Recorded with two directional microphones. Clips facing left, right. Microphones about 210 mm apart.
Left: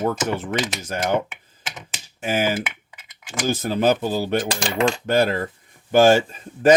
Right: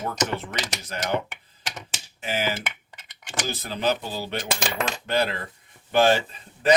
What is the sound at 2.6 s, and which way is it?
Computer keyboard, centre (ahead or behind).